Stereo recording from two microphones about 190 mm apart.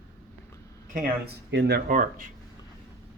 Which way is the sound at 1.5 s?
65° right (ahead or behind).